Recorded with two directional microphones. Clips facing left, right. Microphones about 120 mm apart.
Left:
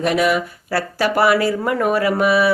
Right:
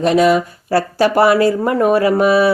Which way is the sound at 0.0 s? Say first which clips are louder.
Right 5 dB; 30° right (ahead or behind).